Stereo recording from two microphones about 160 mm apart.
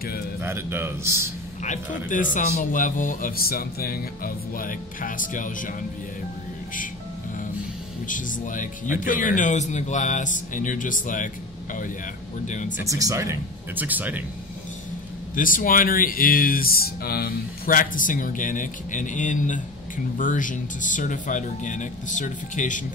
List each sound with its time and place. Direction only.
0.4 s speech: 15° right (ahead or behind)
1.6 s speech: 50° left (ahead or behind)
8.1 s speech: 55° left (ahead or behind)
12.4 s speech: 50° left (ahead or behind)
12.8 s speech: 20° right (ahead or behind)
15.3 s speech: 60° left (ahead or behind)